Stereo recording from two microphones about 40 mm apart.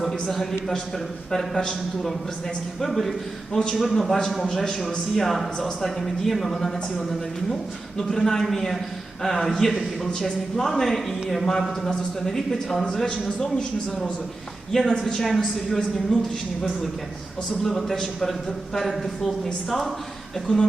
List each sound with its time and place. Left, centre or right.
0.0 s a man's voice: centre
8.1 s a man's voice: centre
14.7 s a man's voice: centre
17.6 s a man's voice: centre
20.5 s speech: centre